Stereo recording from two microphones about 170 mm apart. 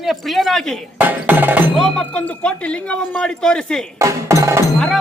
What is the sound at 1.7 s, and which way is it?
Speech, 5° left (ahead or behind).